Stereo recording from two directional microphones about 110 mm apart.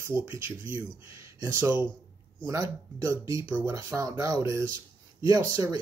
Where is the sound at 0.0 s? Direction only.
25° right (ahead or behind).